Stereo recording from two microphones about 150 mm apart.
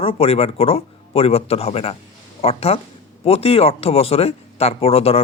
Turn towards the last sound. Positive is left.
turn(degrees=40)  # may be behind; listen again after turning